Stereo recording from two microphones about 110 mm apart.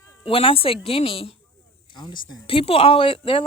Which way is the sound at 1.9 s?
45° left (ahead or behind).